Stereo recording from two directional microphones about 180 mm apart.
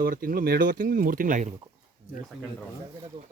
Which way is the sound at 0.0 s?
50° right (ahead or behind).